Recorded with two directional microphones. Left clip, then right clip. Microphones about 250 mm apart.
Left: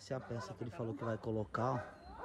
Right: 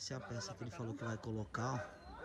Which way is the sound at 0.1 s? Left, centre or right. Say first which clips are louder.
Left 3 dB; centre.